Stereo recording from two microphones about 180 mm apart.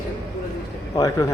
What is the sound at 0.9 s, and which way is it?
Speech, 20° left (ahead or behind).